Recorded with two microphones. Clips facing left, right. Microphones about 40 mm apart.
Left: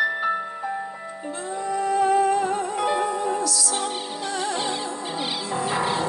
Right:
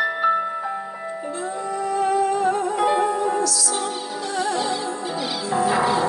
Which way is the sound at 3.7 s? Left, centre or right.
Left.